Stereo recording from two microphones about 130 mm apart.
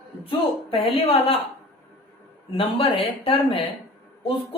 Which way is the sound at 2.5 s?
45° left (ahead or behind).